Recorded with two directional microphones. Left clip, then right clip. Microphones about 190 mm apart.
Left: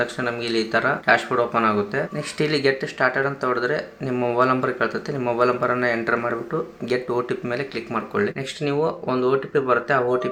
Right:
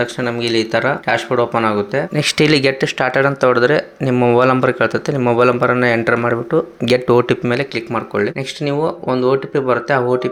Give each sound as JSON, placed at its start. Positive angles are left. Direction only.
{"t": 0.0, "sound": "speech", "side_deg": -30}
{"t": 2.1, "sound": "speech", "side_deg": -45}